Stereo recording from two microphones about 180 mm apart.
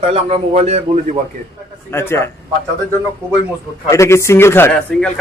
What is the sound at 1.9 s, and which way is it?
Speech, 15° left (ahead or behind).